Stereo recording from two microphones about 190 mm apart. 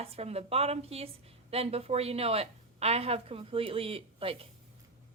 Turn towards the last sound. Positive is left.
turn(degrees=-30)  # may be behind; listen again after turning